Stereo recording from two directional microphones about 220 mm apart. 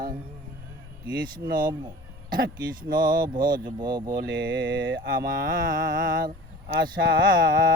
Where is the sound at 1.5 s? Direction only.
40° right (ahead or behind).